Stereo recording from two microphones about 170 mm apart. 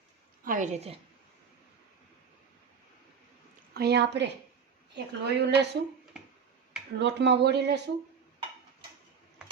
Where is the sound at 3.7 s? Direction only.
70° right (ahead or behind); by 4.3 s 90° right.